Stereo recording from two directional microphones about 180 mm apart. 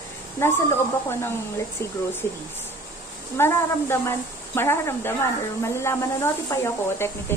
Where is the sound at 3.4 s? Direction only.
15° left (ahead or behind).